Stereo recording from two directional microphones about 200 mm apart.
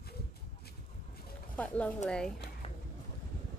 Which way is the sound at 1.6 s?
5° left (ahead or behind).